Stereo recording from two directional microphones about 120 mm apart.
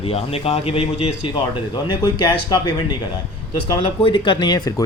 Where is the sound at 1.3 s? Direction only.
40° left (ahead or behind).